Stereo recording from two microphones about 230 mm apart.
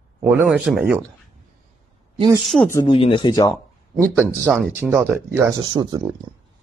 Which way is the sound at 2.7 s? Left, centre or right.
Left.